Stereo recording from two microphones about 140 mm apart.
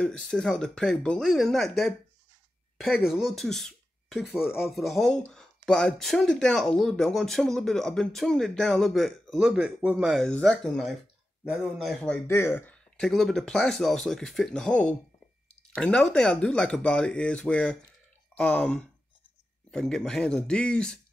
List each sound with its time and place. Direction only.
0.0 s speech: 5° left (ahead or behind)
3.1 s speech: centre (ahead or behind)
12.3 s speech: 15° left (ahead or behind)
12.9 s speech: 5° left (ahead or behind)